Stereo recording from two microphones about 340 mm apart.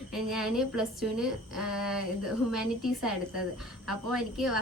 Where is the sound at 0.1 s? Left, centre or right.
Centre.